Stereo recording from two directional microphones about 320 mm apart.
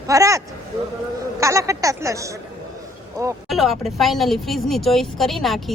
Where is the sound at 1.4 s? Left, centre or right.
Centre.